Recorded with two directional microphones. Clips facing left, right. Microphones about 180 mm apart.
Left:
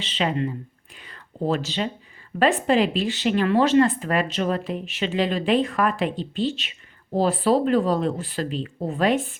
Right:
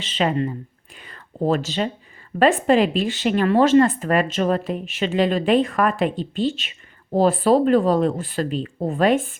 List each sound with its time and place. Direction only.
0.0 s speech: 45° right (ahead or behind)
0.9 s a sound: 50° right (ahead or behind)
2.4 s speech: 50° right (ahead or behind)